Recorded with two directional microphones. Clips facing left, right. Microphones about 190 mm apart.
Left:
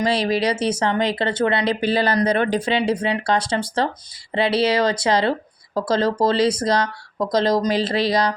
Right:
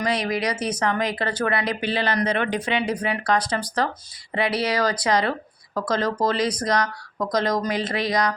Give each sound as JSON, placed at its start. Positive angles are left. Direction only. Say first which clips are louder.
{"t": 0.0, "sound": "speech", "louder": "left 4 dB", "side_deg": 30}